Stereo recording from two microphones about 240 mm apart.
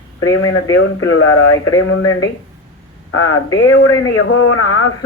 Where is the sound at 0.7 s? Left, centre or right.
Left.